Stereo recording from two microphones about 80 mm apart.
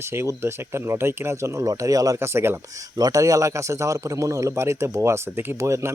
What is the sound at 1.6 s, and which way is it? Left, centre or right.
Speech, right.